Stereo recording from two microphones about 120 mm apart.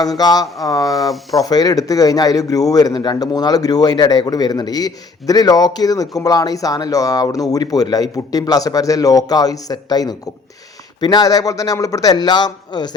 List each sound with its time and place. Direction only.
0.0 s a man's voice: 30° left (ahead or behind)